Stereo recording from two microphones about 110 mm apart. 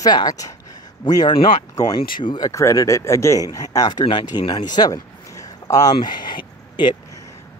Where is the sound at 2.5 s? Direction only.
30° left (ahead or behind).